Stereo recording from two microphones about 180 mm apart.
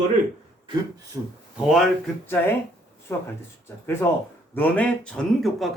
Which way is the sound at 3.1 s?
15° left (ahead or behind).